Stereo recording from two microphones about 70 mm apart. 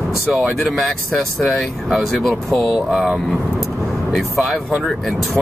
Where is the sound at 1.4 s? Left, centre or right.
Centre.